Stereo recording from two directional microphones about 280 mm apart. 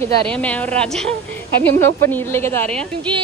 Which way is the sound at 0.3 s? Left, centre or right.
Centre.